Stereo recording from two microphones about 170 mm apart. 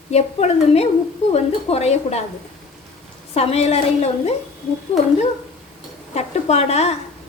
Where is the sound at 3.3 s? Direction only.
35° left (ahead or behind).